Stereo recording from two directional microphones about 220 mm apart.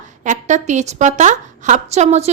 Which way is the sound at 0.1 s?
35° right (ahead or behind).